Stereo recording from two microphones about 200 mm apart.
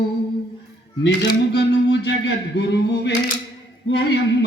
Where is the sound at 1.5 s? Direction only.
60° left (ahead or behind).